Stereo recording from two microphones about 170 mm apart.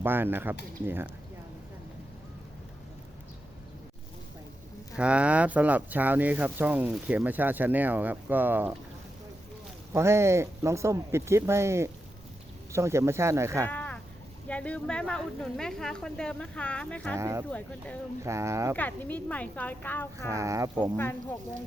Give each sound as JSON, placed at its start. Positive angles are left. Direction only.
{"t": 0.0, "sound": "speech", "side_deg": -10}
{"t": 4.9, "sound": "speech", "side_deg": -5}
{"t": 9.9, "sound": "speech", "side_deg": -15}
{"t": 13.7, "sound": "a sound", "side_deg": 10}
{"t": 14.4, "sound": "speech", "side_deg": 5}
{"t": 17.2, "sound": "speech", "side_deg": -15}
{"t": 17.5, "sound": "a woman's voice", "side_deg": 5}
{"t": 18.2, "sound": "speech", "side_deg": -15}
{"t": 18.8, "sound": "a woman's voice", "side_deg": 10}
{"t": 20.3, "sound": "speech", "side_deg": -20}
{"t": 20.9, "sound": "a woman's voice", "side_deg": 10}